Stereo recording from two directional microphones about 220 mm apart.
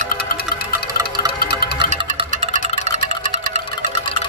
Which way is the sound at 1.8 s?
30° right (ahead or behind).